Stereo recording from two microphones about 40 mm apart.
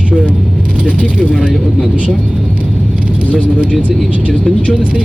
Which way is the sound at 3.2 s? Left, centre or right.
Left.